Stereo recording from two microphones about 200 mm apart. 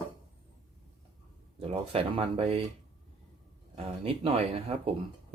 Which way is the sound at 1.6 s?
30° right (ahead or behind).